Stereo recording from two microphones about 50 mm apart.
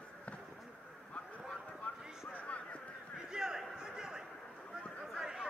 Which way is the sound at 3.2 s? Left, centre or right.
Centre.